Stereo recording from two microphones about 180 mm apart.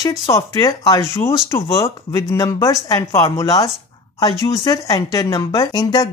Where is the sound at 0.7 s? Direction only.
20° left (ahead or behind).